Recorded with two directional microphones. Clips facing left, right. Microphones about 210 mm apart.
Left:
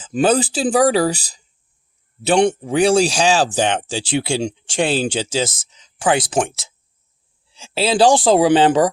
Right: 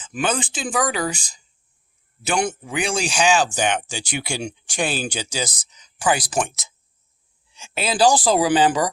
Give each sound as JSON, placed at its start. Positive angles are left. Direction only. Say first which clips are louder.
{"t": 0.0, "sound": "speech", "louder": "left 8 dB", "side_deg": 35}